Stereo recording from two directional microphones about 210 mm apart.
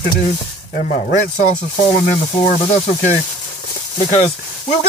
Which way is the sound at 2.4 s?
30° left (ahead or behind).